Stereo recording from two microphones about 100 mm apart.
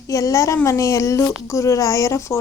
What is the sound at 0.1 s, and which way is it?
Speech, 30° left (ahead or behind).